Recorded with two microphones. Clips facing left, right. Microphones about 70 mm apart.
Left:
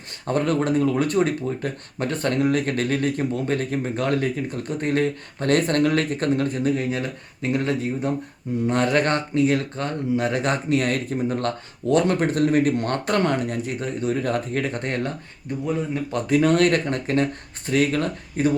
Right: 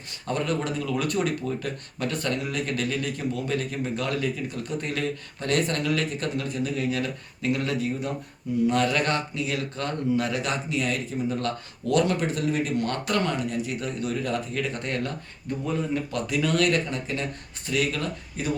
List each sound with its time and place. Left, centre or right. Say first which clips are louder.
0.3 s speech: left 6 dB; left
15.5 s speech: left 2 dB; left
16.1 s speech: left 8 dB; left